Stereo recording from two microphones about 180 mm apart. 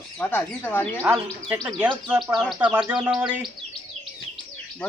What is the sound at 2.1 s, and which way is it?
A man's voice, 5° right (ahead or behind).